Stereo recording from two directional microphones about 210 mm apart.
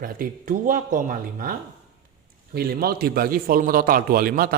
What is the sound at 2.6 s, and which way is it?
A man's voice, 45° right (ahead or behind).